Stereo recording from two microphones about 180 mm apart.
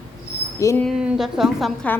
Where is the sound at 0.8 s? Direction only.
Centre (ahead or behind).